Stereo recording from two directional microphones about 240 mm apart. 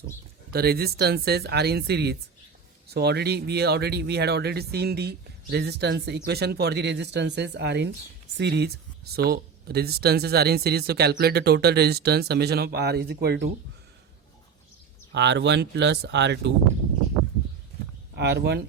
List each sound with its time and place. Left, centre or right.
0.5 s speech: right
15.1 s speech: right
18.2 s speech: right